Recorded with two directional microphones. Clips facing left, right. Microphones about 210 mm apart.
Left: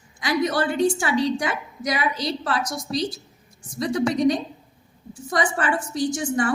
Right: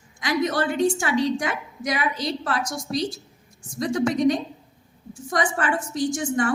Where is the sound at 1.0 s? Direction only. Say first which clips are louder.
Even; 45° right (ahead or behind).